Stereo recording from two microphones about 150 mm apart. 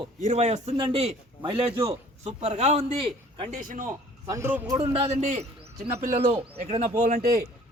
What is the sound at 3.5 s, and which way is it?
Speech, 60° right (ahead or behind).